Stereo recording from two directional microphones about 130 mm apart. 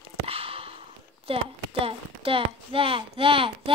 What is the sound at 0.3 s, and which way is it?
Speech, 50° right (ahead or behind).